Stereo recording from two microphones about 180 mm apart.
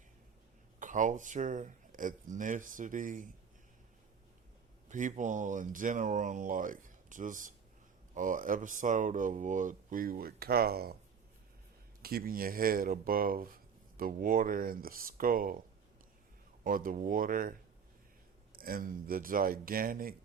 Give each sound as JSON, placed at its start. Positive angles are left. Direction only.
{"t": 0.8, "sound": "speech", "side_deg": -45}
{"t": 4.9, "sound": "speech", "side_deg": -45}
{"t": 12.0, "sound": "speech", "side_deg": -55}
{"t": 16.6, "sound": "speech", "side_deg": -50}
{"t": 18.5, "sound": "speech", "side_deg": -50}